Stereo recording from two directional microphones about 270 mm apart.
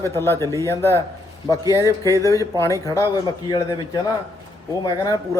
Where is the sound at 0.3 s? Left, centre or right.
Centre.